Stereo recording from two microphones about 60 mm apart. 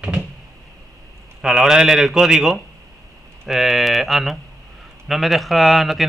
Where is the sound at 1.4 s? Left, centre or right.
Centre.